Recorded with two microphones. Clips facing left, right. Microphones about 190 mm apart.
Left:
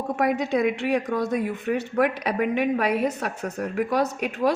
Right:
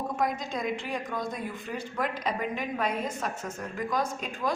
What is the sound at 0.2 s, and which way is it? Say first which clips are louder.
A woman's voice: left 10 dB; 70° left (ahead or behind).